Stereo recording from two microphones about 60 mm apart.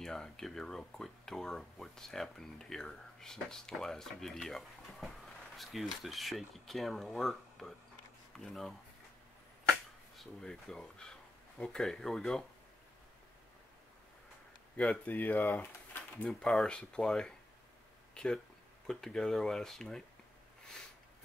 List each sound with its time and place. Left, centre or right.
0.0 s speech: centre
10.4 s speech: centre
14.9 s speech: left
15.6 s a sound: left
16.3 s speech: centre